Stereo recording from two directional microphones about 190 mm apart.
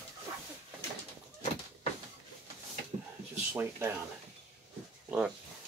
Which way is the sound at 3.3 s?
10° right (ahead or behind).